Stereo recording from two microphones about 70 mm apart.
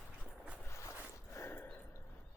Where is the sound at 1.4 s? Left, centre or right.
Left.